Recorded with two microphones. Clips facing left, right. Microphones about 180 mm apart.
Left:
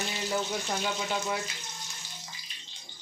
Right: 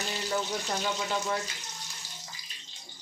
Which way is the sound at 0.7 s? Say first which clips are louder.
Even; 5° left (ahead or behind).